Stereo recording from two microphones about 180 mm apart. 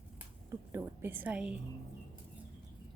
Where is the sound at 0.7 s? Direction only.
10° right (ahead or behind).